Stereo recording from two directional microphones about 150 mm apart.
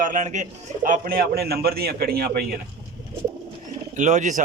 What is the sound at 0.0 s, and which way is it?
A man's voice, 55° right (ahead or behind).